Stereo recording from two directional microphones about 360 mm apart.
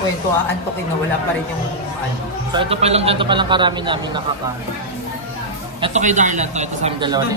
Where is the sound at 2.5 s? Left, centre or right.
Centre.